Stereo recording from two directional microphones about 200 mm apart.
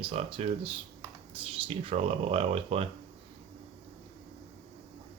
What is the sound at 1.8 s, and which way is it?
Speech, 30° right (ahead or behind).